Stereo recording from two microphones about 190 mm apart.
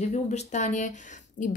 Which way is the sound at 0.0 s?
35° left (ahead or behind).